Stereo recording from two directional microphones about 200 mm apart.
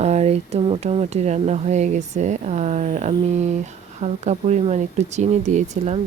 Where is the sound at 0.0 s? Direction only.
35° right (ahead or behind).